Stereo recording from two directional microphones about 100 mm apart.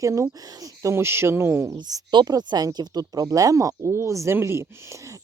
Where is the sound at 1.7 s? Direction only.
50° right (ahead or behind).